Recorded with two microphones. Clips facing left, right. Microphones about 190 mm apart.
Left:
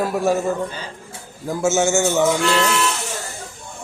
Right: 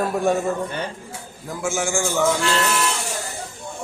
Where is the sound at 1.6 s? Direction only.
25° left (ahead or behind).